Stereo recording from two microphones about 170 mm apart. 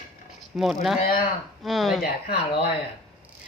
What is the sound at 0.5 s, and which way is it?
Speech, centre (ahead or behind).